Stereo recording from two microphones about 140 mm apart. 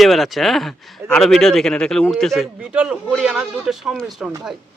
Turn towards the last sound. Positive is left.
turn(degrees=0)  # may be behind; listen again after turning